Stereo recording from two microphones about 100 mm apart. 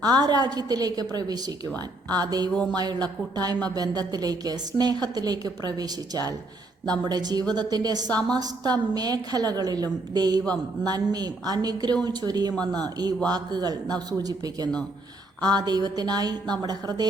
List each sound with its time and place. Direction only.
0.0 s a woman's voice: 45° right (ahead or behind)